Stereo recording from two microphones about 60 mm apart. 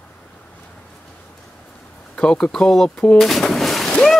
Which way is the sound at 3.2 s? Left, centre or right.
Centre.